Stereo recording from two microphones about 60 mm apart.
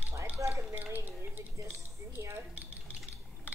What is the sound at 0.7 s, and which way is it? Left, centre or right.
Speech, right.